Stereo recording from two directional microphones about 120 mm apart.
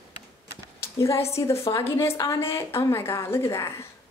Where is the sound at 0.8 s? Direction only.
25° left (ahead or behind).